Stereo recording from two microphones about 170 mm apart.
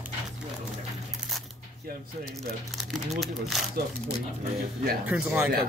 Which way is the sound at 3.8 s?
65° right (ahead or behind).